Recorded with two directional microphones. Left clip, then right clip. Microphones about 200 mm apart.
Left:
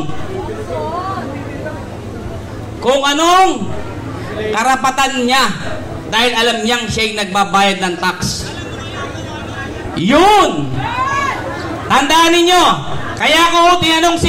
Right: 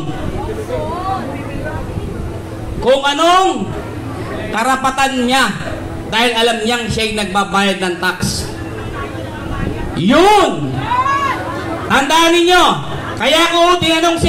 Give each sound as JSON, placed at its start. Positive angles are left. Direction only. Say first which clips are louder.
{"t": 2.8, "sound": "a man's voice", "louder": "even", "side_deg": 15}
{"t": 4.6, "sound": "a man's voice", "louder": "left 1 dB", "side_deg": 20}
{"t": 9.9, "sound": "speech", "louder": "left 1 dB", "side_deg": 20}
{"t": 11.9, "sound": "speech", "louder": "left 1 dB", "side_deg": 20}